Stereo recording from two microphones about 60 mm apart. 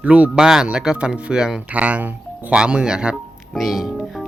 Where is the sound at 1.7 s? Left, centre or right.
Right.